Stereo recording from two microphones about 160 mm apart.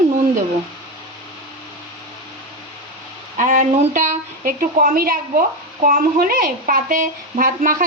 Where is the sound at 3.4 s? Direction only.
50° right (ahead or behind).